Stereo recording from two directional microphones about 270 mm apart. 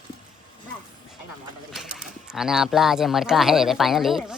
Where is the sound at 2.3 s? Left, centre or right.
Centre.